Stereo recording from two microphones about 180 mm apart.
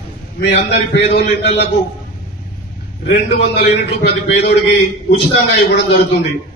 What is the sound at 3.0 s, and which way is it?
A man's voice, 70° left (ahead or behind).